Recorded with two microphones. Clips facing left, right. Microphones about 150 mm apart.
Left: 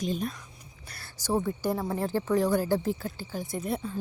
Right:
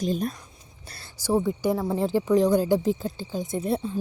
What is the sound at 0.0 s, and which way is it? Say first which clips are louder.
Speech: right 4 dB; 40° right (ahead or behind).